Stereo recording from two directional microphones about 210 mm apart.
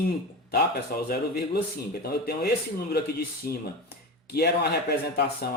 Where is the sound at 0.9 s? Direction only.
45° left (ahead or behind).